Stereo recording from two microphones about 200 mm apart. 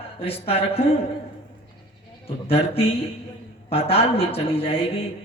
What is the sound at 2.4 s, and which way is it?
Speech, 30° left (ahead or behind).